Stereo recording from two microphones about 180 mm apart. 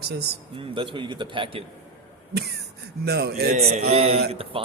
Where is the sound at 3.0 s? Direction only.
60° right (ahead or behind).